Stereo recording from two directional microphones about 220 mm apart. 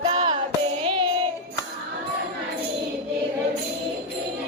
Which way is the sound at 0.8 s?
25° right (ahead or behind).